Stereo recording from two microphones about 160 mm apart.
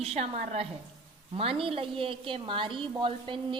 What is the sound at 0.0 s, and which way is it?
A woman's voice, 45° right (ahead or behind).